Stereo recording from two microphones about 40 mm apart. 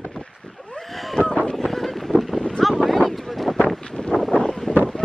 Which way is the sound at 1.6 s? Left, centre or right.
Centre.